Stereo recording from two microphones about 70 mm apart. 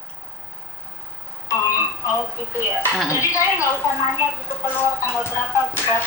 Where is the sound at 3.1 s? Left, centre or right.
Left.